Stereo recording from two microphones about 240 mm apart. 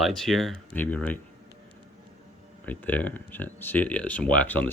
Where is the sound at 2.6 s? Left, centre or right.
Centre.